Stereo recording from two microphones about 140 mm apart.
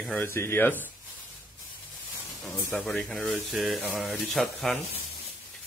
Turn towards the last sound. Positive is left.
turn(degrees=0)  # may be behind; listen again after turning